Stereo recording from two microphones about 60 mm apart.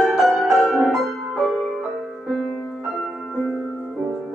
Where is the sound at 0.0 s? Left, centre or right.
Centre.